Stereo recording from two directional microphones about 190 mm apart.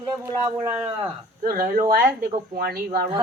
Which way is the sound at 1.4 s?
45° right (ahead or behind).